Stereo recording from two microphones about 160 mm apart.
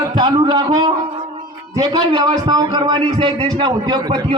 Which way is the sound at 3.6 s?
25° right (ahead or behind).